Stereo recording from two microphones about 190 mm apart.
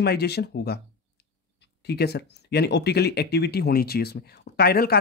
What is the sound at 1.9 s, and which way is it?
Speech, 60° left (ahead or behind).